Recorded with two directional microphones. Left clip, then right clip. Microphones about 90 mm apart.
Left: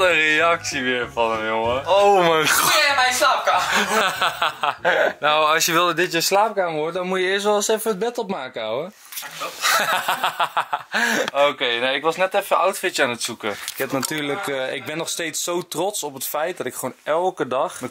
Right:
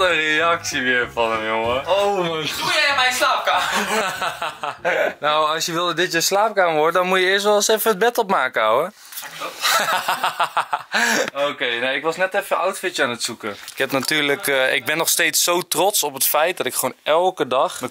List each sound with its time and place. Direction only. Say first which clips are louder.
0.0 s speech: left 1 dB; centre (ahead or behind)
1.9 s speech: left 5 dB; 5° left (ahead or behind)
2.5 s speech: left 2 dB; 5° right (ahead or behind)
3.7 s speech: left 2 dB; 15° left (ahead or behind)
6.7 s speech: right 7 dB; 30° right (ahead or behind)
7.2 s speech: right 3 dB; 5° right (ahead or behind)
7.8 s speech: right 6 dB; 25° right (ahead or behind)
9.6 s speech: right 1 dB; centre (ahead or behind)
11.3 s speech: left 3 dB; 10° left (ahead or behind)
14.0 s speech: right 5 dB; 25° right (ahead or behind)
17.2 s speech: right 2 dB; 5° right (ahead or behind)